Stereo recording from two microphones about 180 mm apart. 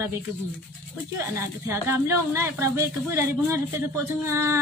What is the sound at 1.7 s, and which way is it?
A woman's voice, 15° right (ahead or behind).